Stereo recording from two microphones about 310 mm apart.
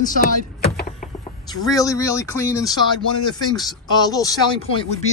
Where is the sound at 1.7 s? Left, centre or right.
Centre.